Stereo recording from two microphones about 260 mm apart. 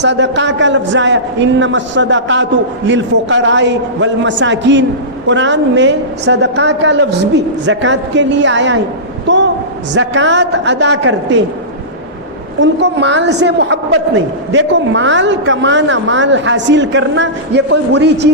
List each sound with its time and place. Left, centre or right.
0.0 s a woman's voice: right
9.2 s a sound: right
9.9 s a woman's voice: right
12.5 s a woman's voice: right